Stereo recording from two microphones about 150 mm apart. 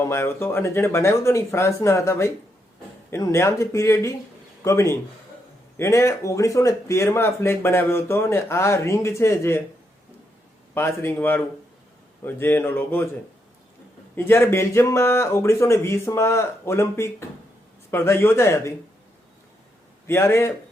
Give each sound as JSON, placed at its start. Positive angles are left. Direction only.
{"t": 0.0, "sound": "speech", "side_deg": 15}
{"t": 10.8, "sound": "speech", "side_deg": 15}
{"t": 14.2, "sound": "speech", "side_deg": 15}
{"t": 20.1, "sound": "speech", "side_deg": 15}